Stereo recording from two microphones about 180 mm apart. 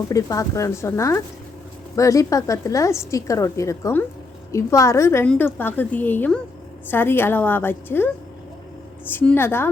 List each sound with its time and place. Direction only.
0.1 s a woman's voice: 20° left (ahead or behind)